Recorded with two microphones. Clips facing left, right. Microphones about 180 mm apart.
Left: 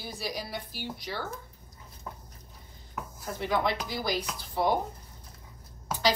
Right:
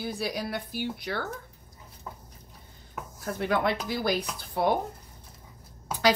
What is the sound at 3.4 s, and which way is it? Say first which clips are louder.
A woman's voice: right 2 dB; 55° right (ahead or behind).